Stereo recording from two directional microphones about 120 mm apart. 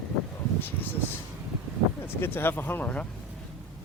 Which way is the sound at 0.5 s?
15° left (ahead or behind).